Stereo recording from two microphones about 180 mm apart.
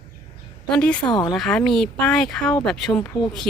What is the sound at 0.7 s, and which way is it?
Speech, 5° left (ahead or behind).